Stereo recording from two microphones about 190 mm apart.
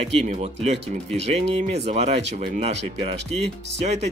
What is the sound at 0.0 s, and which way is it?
Speech, 35° right (ahead or behind).